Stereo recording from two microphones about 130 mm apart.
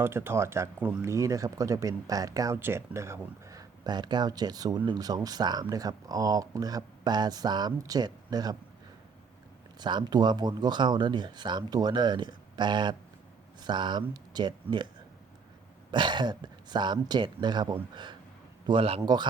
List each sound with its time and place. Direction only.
0.0 s speech: 20° right (ahead or behind)
9.8 s speech: 35° right (ahead or behind)
15.9 s speech: 35° right (ahead or behind)
19.0 s speech: 35° right (ahead or behind)